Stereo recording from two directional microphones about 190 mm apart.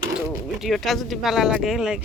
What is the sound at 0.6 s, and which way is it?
Speech, centre (ahead or behind).